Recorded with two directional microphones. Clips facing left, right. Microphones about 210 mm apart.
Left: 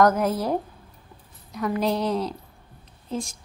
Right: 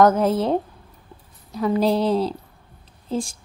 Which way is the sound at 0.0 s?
25° right (ahead or behind).